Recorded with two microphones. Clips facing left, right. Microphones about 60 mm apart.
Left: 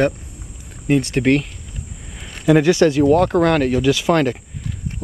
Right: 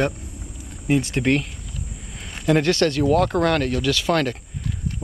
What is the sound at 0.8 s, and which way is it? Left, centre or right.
Speech, centre.